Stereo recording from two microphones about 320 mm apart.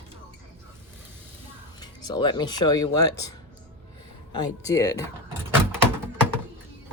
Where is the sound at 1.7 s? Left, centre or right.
Centre.